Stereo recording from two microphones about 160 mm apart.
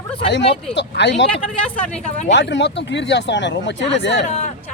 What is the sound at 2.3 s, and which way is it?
Speech, 90° left.